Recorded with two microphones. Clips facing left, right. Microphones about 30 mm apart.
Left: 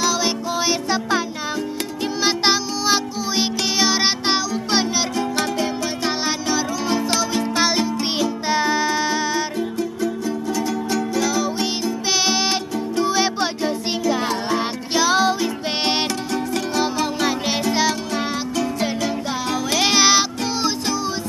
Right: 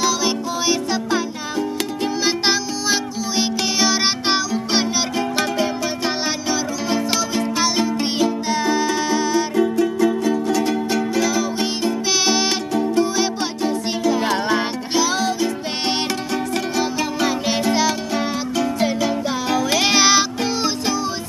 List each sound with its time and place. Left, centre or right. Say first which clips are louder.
0.0 s music: right 1 dB; centre
2.2 s music: left 2 dB; centre
8.5 s music: even; centre
8.9 s music: right 2 dB; centre
9.6 s music: right 6 dB; right
10.5 s music: right 4 dB; right
11.1 s music: right 1 dB; centre
13.0 s music: left 1 dB; centre
15.0 s music: left 2 dB; centre
16.7 s music: left 2 dB; centre